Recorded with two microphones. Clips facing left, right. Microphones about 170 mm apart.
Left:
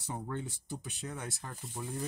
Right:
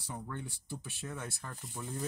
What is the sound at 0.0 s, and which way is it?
Speech, 20° left (ahead or behind).